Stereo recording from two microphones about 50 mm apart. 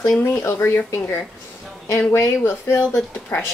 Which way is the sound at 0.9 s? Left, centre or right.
Left.